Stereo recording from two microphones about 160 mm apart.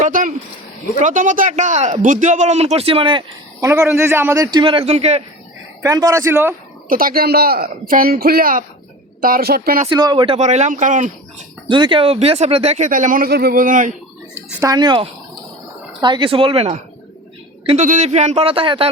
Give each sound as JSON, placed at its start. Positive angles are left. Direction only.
{"t": 0.0, "sound": "speech", "side_deg": -55}
{"t": 3.6, "sound": "a man's voice", "side_deg": -15}
{"t": 5.8, "sound": "speech", "side_deg": -20}
{"t": 6.8, "sound": "speech", "side_deg": -65}
{"t": 9.9, "sound": "speech", "side_deg": -25}
{"t": 11.7, "sound": "speech", "side_deg": -30}
{"t": 14.6, "sound": "a man's voice", "side_deg": -25}
{"t": 17.7, "sound": "speech", "side_deg": -50}